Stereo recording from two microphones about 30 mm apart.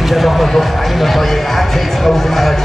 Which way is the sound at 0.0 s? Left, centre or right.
Centre.